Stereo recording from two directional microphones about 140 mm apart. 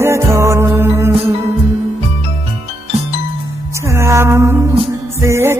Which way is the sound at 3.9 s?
20° right (ahead or behind).